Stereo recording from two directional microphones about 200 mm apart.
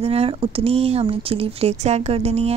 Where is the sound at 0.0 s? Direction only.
30° right (ahead or behind).